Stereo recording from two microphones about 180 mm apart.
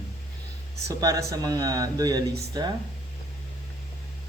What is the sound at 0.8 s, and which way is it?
Speech, 20° right (ahead or behind).